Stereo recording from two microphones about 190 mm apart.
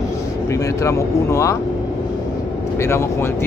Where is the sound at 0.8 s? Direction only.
15° left (ahead or behind).